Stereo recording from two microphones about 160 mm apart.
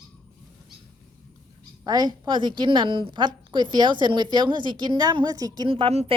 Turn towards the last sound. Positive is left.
turn(degrees=-35)  # may be behind; listen again after turning